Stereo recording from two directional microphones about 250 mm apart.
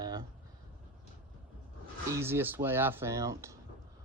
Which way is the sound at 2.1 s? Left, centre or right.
Centre.